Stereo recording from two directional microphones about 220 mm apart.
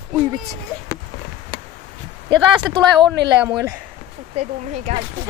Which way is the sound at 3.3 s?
10° right (ahead or behind).